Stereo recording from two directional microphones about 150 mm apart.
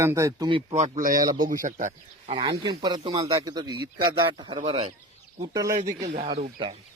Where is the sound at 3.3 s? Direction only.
25° right (ahead or behind).